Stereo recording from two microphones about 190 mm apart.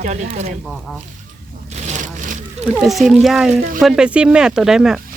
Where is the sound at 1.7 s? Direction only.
40° right (ahead or behind).